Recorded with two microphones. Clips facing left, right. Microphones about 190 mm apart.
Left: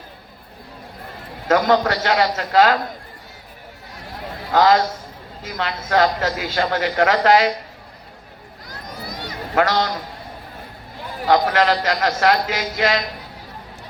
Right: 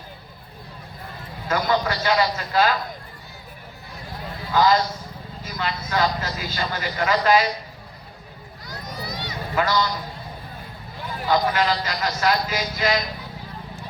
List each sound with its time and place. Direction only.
1.5 s a man's voice: 80° left
4.5 s a man's voice: 85° left
9.0 s a sound: 55° left (ahead or behind)
9.6 s a man's voice: 75° left (ahead or behind)
11.3 s a man's voice: 85° left
12.2 s a man's voice: 80° left